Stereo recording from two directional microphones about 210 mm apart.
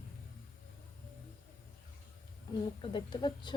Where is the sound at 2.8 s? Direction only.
20° left (ahead or behind).